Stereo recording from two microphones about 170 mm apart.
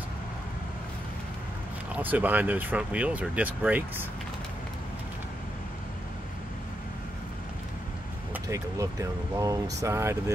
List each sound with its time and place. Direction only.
2.0 s speech: 10° right (ahead or behind)
8.3 s speech: 20° right (ahead or behind)